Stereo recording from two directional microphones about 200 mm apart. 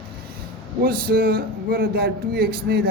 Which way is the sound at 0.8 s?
50° right (ahead or behind).